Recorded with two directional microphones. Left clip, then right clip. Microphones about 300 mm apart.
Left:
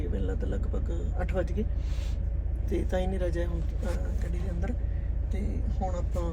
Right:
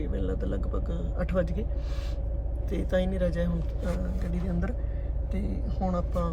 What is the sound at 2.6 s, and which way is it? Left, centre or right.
Speech, centre.